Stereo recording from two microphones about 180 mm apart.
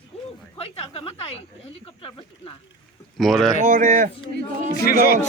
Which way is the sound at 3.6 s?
50° right (ahead or behind).